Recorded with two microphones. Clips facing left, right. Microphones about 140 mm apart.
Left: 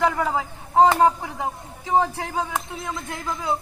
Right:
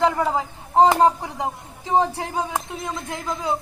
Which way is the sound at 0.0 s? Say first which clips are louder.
Right 2 dB; 25° right (ahead or behind).